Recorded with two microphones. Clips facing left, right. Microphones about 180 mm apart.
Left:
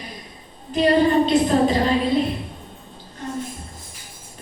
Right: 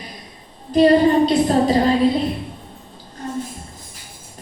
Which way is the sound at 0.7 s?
35° right (ahead or behind).